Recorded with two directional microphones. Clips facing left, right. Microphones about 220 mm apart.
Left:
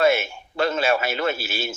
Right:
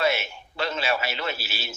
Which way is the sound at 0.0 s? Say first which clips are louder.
Left 6 dB; 50° left (ahead or behind).